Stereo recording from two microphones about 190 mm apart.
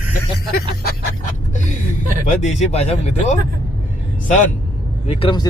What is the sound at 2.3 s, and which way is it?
Speech, 35° left (ahead or behind).